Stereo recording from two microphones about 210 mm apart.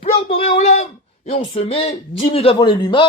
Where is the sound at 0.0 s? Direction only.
25° left (ahead or behind).